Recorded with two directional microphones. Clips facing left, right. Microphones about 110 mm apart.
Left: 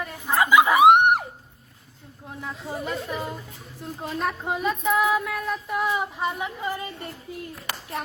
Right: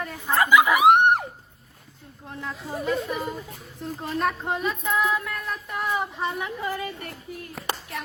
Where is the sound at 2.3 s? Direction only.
5° left (ahead or behind).